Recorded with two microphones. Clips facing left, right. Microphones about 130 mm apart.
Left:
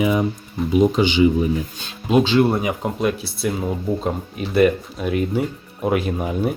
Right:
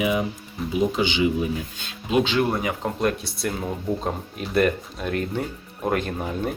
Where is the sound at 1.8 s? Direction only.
35° left (ahead or behind).